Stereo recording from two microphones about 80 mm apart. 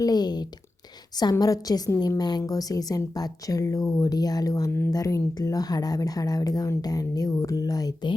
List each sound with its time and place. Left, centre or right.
0.0 s a woman's voice: left